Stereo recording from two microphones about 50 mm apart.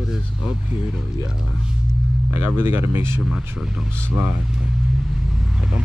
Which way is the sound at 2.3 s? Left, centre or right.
Right.